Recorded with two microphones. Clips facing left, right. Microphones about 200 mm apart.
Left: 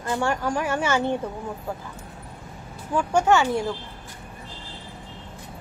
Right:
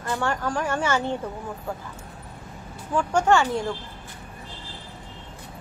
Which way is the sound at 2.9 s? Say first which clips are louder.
Even; 10° left (ahead or behind).